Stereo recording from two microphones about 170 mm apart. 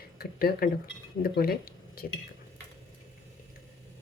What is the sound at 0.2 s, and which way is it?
Speech, 65° left (ahead or behind).